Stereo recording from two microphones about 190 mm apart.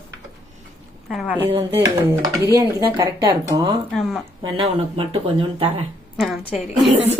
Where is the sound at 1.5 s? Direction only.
20° right (ahead or behind).